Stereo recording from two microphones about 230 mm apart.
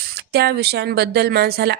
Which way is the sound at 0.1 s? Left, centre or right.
Right.